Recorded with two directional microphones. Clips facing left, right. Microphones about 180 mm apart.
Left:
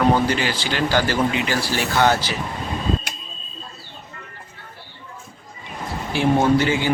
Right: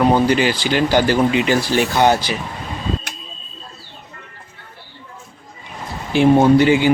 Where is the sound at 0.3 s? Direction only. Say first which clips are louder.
Right 6 dB; 15° right (ahead or behind).